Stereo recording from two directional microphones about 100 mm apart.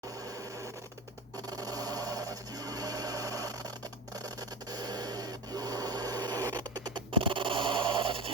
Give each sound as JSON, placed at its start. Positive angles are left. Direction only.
{"t": 1.5, "sound": "sewing machine", "side_deg": -40}
{"t": 4.2, "sound": "printer", "side_deg": -40}